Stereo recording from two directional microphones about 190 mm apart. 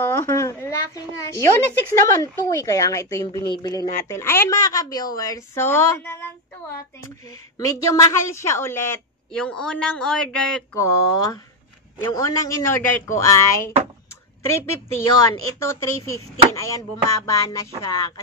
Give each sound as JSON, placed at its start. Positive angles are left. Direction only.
{"t": 0.0, "sound": "a woman's voice", "side_deg": 15}
{"t": 7.2, "sound": "a woman's voice", "side_deg": 15}
{"t": 10.7, "sound": "a woman's voice", "side_deg": 15}